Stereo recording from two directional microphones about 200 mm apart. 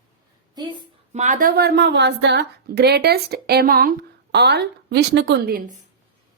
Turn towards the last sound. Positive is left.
turn(degrees=-45)  # may be behind; listen again after turning